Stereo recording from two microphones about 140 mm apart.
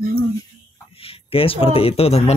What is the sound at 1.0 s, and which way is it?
Speech, 40° left (ahead or behind).